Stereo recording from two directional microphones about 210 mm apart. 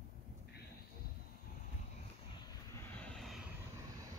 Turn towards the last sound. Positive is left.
turn(degrees=5)  # may be behind; listen again after turning